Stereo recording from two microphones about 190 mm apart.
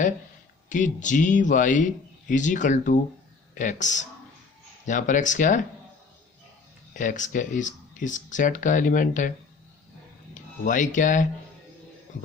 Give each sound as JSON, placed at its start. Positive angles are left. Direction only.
{"t": 0.7, "sound": "speech", "side_deg": 40}
{"t": 6.9, "sound": "speech", "side_deg": 40}
{"t": 10.6, "sound": "speech", "side_deg": 45}